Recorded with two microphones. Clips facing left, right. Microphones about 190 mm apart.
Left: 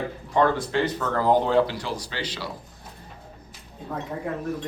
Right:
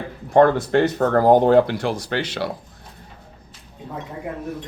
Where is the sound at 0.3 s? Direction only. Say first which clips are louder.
Right 7 dB; 55° right (ahead or behind).